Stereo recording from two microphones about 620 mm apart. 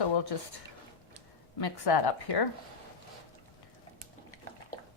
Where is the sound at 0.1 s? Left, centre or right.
Left.